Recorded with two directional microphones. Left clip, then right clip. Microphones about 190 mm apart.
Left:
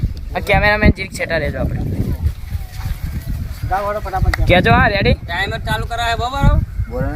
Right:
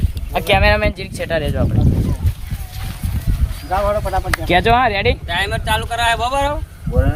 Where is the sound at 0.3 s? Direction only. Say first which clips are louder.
Even; 25° left (ahead or behind).